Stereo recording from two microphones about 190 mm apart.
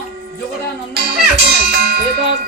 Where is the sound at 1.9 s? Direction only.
55° right (ahead or behind).